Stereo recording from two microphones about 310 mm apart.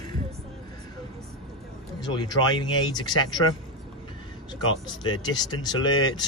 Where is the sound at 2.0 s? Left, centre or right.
Centre.